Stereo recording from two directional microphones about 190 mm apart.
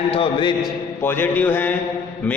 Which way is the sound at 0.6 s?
10° left (ahead or behind).